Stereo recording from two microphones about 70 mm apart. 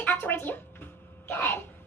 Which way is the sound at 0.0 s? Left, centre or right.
Left.